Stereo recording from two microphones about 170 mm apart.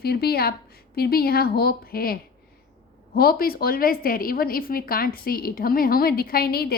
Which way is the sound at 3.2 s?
60° left (ahead or behind).